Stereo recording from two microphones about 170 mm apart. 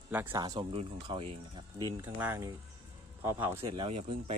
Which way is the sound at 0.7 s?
35° right (ahead or behind).